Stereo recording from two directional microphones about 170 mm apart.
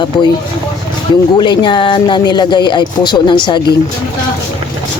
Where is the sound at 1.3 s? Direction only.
25° left (ahead or behind).